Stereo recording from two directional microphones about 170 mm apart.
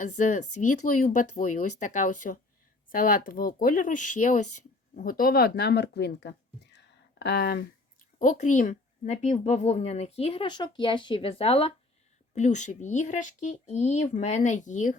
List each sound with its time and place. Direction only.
0.0 s a woman's voice: 45° left (ahead or behind); by 6.3 s 80° left
6.7 s a sound: 85° left; by 7.6 s 65° left (ahead or behind)
8.2 s a woman's voice: 50° left (ahead or behind)